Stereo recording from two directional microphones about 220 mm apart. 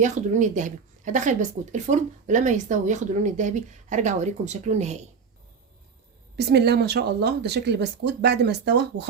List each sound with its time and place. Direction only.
0.0 s speech: 35° right (ahead or behind)
6.3 s speech: 50° right (ahead or behind)